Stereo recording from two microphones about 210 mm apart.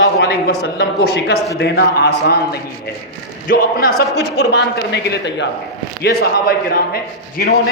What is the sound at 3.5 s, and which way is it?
A man's voice, 45° left (ahead or behind).